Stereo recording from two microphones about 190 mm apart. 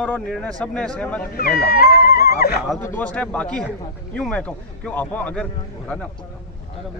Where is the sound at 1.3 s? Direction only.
50° left (ahead or behind).